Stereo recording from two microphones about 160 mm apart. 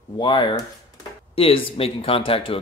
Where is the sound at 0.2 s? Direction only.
30° left (ahead or behind).